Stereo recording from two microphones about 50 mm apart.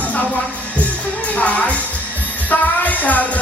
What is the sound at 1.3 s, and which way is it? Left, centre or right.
Speech, left.